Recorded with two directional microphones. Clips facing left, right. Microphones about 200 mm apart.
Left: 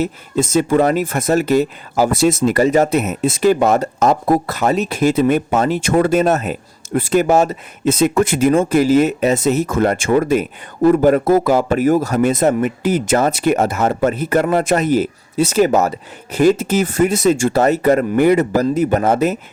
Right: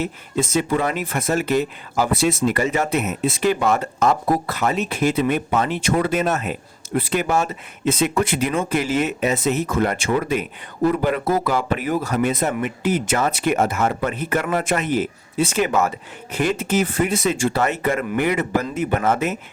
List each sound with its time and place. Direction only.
0.0 s speech: 40° left (ahead or behind)